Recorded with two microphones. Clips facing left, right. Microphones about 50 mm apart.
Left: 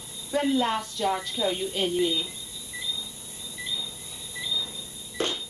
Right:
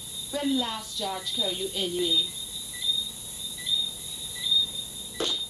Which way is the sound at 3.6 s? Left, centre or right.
Left.